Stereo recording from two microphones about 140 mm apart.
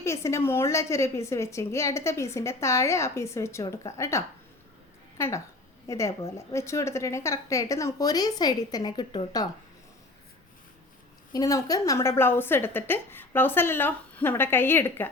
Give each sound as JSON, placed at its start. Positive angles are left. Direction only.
{"t": 0.0, "sound": "a woman's voice", "side_deg": 20}
{"t": 11.3, "sound": "a woman's voice", "side_deg": 25}